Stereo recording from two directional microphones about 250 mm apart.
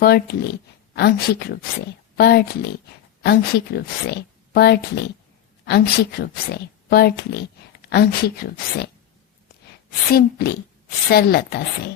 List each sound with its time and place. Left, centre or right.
0.0 s speech: left
10.1 s speech: left